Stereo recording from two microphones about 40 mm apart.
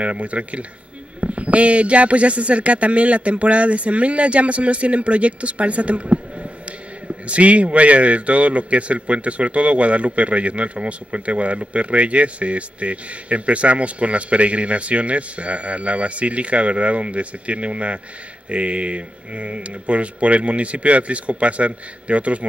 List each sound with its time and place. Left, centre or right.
0.0 s a man's voice: right